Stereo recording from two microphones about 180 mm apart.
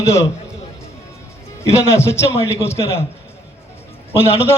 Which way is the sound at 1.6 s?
15° left (ahead or behind).